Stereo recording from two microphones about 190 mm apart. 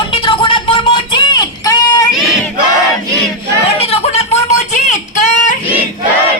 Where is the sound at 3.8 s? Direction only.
35° left (ahead or behind).